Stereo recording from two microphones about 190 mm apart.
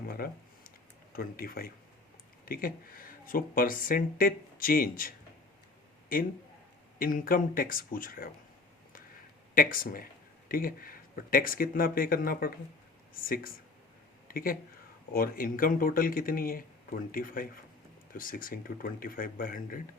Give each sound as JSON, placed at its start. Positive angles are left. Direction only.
{"t": 0.0, "sound": "a sound", "side_deg": 50}
{"t": 1.1, "sound": "speech", "side_deg": 50}
{"t": 7.0, "sound": "speech", "side_deg": 50}
{"t": 9.6, "sound": "speech", "side_deg": 50}